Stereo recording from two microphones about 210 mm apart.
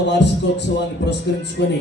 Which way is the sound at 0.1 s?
55° left (ahead or behind).